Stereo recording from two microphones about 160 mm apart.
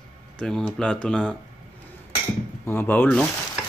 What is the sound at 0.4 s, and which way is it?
Speech, 5° left (ahead or behind).